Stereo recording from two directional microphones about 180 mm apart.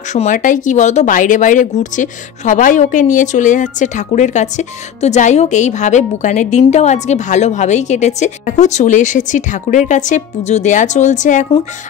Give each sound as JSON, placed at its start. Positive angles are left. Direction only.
{"t": 0.1, "sound": "speech", "side_deg": 45}